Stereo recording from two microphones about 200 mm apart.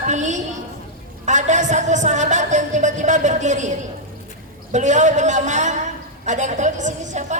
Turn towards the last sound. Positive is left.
turn(degrees=-35)  # may be behind; listen again after turning